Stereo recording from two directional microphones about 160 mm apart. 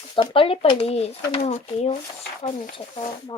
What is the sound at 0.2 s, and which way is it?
Speech, 35° left (ahead or behind).